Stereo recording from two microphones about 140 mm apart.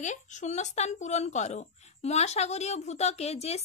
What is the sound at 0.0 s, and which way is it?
Speech, 60° left (ahead or behind).